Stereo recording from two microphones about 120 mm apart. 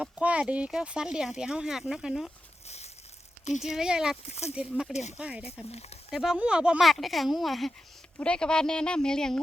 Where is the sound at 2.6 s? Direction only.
65° left (ahead or behind).